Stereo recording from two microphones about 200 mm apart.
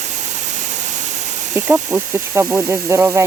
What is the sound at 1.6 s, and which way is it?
Speech, 5° right (ahead or behind).